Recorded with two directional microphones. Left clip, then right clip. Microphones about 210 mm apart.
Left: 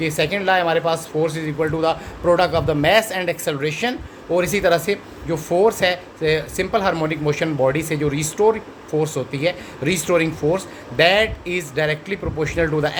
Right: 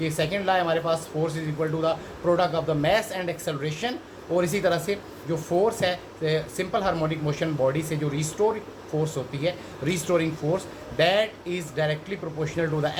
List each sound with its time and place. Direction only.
0.0 s speech: 50° left (ahead or behind)